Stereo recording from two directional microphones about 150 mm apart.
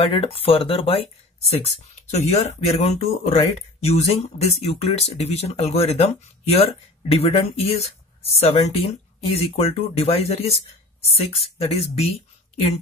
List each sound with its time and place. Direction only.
0.0 s speech: 40° left (ahead or behind)